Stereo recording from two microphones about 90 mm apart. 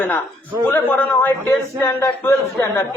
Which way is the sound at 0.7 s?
20° left (ahead or behind).